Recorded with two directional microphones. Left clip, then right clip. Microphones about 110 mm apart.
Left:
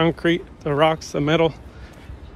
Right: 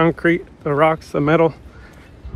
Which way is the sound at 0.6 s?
15° right (ahead or behind).